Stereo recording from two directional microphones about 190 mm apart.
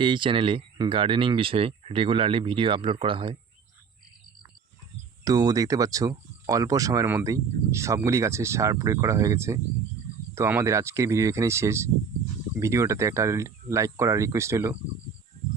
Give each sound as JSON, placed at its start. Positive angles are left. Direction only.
{"t": 0.0, "sound": "speech", "side_deg": -25}
{"t": 5.2, "sound": "speech", "side_deg": -20}